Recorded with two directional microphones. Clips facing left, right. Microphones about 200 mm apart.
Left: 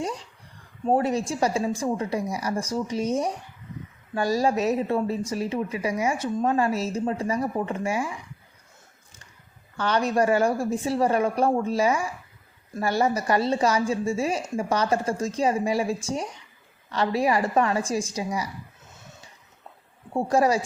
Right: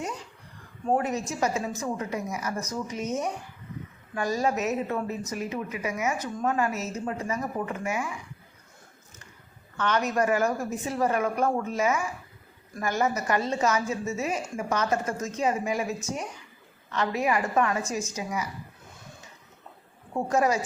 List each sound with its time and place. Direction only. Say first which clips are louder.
0.9 s a woman's voice: left 4 dB; 30° left (ahead or behind)
9.7 s a woman's voice: left 3 dB; 35° left (ahead or behind)
20.1 s a woman's voice: left 3 dB; 35° left (ahead or behind)